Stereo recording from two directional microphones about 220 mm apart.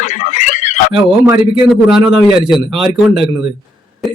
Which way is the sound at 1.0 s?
5° right (ahead or behind).